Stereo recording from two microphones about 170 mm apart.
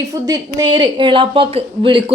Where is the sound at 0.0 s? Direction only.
20° right (ahead or behind).